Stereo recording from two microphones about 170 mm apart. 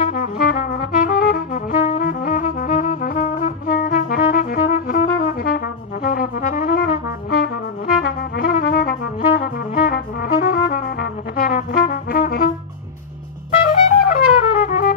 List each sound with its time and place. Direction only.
0.1 s music: 60° left (ahead or behind)
5.2 s brass instrument: 60° left (ahead or behind)
7.3 s trumpet: 60° left (ahead or behind)
13.7 s trumpet: 55° left (ahead or behind)